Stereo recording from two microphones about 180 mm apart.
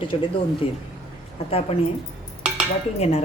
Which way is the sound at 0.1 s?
30° left (ahead or behind).